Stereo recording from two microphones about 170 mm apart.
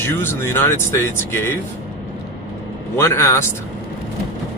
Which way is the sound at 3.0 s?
15° left (ahead or behind).